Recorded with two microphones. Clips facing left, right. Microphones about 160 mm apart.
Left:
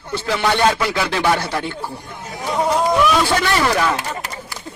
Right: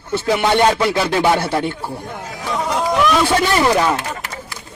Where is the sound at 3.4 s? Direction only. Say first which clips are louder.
Right 3 dB; 25° right (ahead or behind).